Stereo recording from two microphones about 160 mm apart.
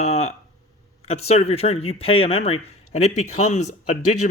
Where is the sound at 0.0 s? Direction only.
45° left (ahead or behind).